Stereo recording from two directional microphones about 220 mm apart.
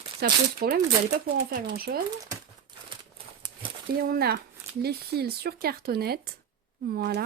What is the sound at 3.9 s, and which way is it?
Speech, 45° right (ahead or behind).